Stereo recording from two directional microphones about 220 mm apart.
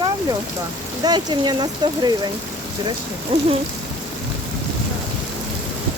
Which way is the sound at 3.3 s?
25° right (ahead or behind).